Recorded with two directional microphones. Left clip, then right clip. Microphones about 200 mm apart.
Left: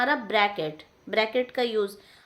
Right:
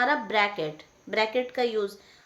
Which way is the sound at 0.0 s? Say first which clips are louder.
Left 1 dB; 15° left (ahead or behind).